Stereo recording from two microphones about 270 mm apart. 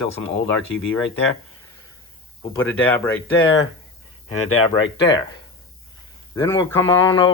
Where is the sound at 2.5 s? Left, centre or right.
Centre.